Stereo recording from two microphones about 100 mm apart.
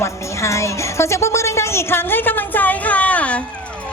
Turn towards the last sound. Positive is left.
turn(degrees=15)  # may be behind; listen again after turning